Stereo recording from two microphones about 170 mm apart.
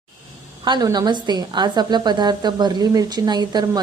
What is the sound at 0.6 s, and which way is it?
A woman's voice, 25° right (ahead or behind).